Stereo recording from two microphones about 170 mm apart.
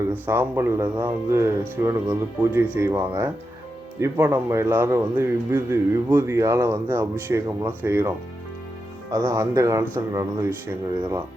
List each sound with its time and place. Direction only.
0.0 s speech: 15° right (ahead or behind)
9.1 s speech: 20° right (ahead or behind)